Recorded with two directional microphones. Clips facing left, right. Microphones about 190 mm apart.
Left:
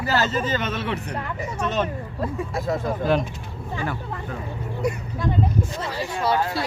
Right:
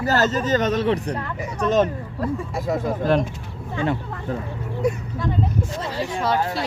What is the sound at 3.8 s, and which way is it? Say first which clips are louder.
Speech: right 7 dB; 25° right (ahead or behind).